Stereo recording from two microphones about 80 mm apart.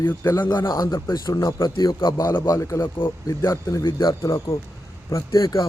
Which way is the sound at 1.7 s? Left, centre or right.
Left.